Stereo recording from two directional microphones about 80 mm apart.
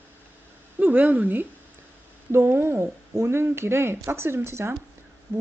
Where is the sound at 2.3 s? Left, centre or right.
Right.